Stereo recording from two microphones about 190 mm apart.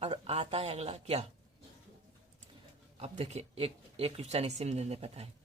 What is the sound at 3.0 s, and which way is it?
Speech, 35° right (ahead or behind).